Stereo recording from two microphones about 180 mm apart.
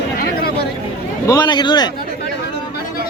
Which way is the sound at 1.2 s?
20° left (ahead or behind).